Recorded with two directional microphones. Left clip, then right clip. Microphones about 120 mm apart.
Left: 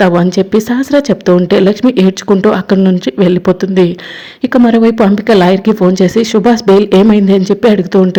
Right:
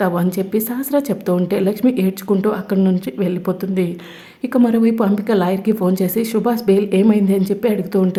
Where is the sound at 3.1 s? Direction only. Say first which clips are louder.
Left 11 dB; 40° left (ahead or behind).